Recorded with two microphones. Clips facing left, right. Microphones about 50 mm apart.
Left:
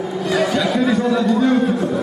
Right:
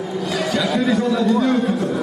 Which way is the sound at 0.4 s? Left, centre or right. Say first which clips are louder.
Left 2 dB; centre.